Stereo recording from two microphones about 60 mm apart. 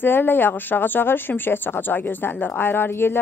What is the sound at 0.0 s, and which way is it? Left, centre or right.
A woman's voice, left.